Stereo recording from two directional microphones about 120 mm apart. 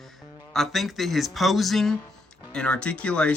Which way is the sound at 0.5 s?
Centre (ahead or behind).